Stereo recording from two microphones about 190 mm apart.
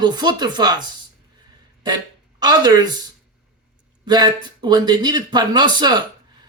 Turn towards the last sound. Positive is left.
turn(degrees=-25)  # may be behind; listen again after turning